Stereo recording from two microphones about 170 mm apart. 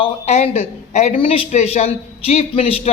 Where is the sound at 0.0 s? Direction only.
40° left (ahead or behind).